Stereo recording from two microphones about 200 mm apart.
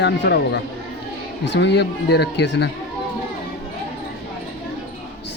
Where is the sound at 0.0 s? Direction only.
60° left (ahead or behind).